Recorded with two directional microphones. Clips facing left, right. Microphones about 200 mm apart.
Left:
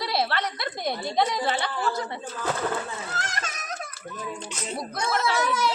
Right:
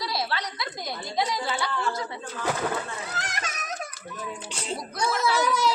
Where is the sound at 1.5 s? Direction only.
55° left (ahead or behind).